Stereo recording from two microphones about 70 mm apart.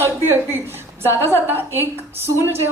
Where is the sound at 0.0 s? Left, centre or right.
Right.